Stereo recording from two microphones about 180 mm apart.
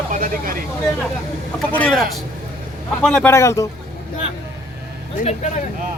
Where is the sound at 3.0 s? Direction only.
5° left (ahead or behind).